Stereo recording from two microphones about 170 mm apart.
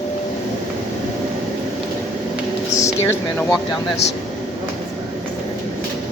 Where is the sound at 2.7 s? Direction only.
15° left (ahead or behind).